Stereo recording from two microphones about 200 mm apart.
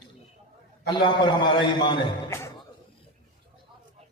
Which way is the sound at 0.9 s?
20° left (ahead or behind).